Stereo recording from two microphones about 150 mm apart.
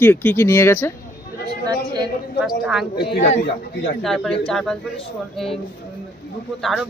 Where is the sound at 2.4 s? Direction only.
5° right (ahead or behind).